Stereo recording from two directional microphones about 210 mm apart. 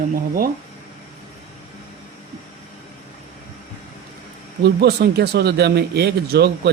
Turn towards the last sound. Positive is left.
turn(degrees=-50)  # may be behind; listen again after turning